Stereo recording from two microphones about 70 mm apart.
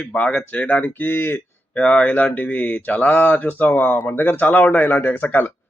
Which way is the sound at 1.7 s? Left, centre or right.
Centre.